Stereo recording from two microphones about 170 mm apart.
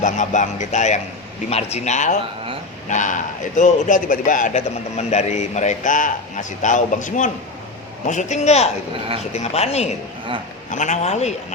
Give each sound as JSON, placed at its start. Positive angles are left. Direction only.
{"t": 0.0, "sound": "a man's voice", "side_deg": 45}